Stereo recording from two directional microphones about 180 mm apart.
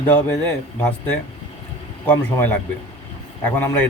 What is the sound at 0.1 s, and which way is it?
Speech, 10° left (ahead or behind).